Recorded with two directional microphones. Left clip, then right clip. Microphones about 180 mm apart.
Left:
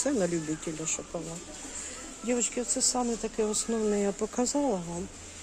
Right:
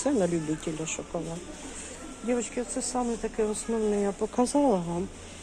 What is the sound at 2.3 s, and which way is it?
Speech, 50° left (ahead or behind).